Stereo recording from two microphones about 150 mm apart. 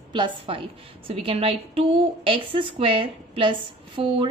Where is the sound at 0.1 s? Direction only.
35° right (ahead or behind).